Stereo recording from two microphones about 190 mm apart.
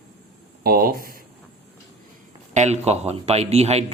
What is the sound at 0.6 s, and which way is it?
Speech, 50° right (ahead or behind).